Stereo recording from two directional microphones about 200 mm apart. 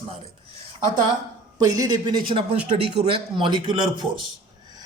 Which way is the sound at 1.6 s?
15° right (ahead or behind).